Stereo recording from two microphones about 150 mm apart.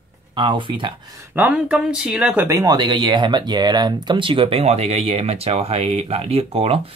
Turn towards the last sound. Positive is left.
turn(degrees=-40)  # may be behind; listen again after turning